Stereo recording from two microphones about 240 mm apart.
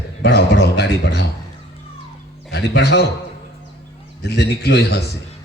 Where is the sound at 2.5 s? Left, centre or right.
Left.